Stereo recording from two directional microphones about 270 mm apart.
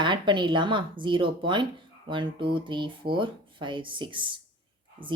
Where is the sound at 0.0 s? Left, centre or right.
Centre.